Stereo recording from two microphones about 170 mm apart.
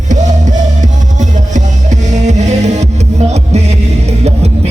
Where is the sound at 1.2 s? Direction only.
45° right (ahead or behind).